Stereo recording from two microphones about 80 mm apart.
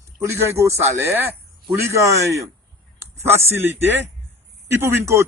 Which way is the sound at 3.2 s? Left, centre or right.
Right.